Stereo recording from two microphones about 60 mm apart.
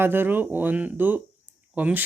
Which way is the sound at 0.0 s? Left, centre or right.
Right.